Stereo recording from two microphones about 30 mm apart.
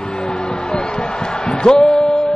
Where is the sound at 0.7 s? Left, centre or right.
Left.